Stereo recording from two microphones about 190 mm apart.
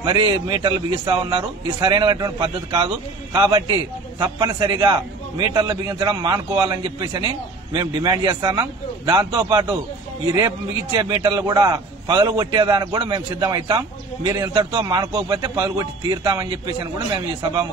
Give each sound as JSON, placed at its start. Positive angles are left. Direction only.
{"t": 0.0, "sound": "a man's voice", "side_deg": -25}
{"t": 11.0, "sound": "a man's voice", "side_deg": -25}